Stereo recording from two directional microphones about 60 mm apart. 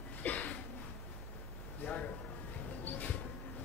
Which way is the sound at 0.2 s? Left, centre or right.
Left.